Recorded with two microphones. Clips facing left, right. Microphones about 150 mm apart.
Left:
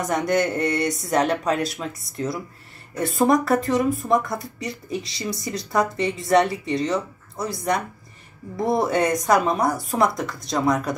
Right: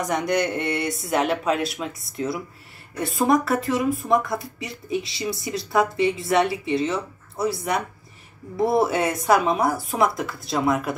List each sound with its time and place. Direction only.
0.0 s speech: centre (ahead or behind)
8.5 s speech: 5° right (ahead or behind)